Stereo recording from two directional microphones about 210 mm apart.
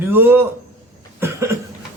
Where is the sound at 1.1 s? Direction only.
15° right (ahead or behind).